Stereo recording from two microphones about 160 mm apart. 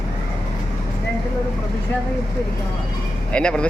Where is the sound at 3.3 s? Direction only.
5° left (ahead or behind).